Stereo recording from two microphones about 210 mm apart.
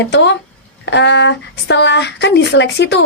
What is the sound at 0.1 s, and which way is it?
A woman's voice, 55° left (ahead or behind).